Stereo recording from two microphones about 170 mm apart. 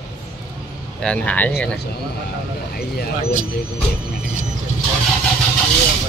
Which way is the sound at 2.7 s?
60° left (ahead or behind).